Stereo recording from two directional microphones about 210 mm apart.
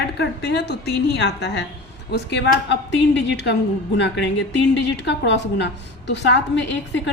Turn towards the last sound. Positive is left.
turn(degrees=60)  # may be behind; listen again after turning